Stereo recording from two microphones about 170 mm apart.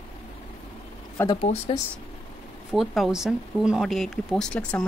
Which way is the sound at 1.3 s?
35° left (ahead or behind).